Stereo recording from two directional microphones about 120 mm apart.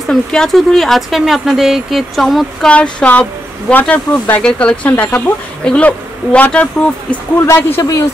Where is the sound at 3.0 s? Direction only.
10° left (ahead or behind).